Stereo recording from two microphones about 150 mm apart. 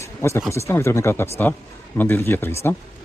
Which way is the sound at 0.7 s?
15° left (ahead or behind).